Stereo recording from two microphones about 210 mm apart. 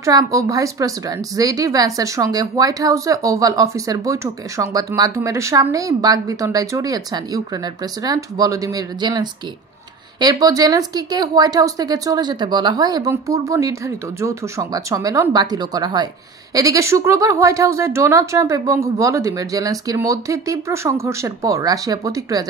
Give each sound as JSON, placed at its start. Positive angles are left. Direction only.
{"t": 0.0, "sound": "speech", "side_deg": -15}